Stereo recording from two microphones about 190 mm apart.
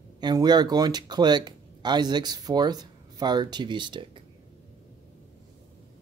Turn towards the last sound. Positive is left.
turn(degrees=-25)  # may be behind; listen again after turning